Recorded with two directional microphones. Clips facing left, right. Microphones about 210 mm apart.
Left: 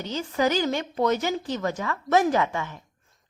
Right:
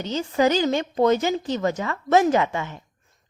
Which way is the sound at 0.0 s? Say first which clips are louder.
Right 4 dB; 25° right (ahead or behind).